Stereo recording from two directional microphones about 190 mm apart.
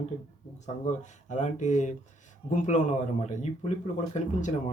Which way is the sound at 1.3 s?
40° left (ahead or behind).